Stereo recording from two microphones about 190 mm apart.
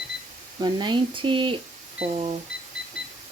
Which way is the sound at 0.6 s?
25° right (ahead or behind).